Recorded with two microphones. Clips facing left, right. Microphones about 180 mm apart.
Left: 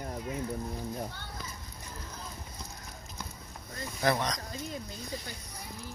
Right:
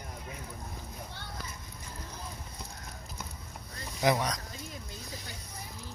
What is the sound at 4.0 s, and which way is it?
Speech, 10° right (ahead or behind).